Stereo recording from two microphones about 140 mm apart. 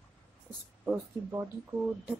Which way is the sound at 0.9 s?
15° right (ahead or behind).